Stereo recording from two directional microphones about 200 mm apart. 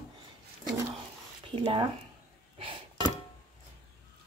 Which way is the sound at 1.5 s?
25° right (ahead or behind).